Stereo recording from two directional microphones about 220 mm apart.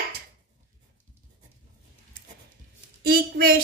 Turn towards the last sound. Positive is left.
turn(degrees=-45)  # may be behind; listen again after turning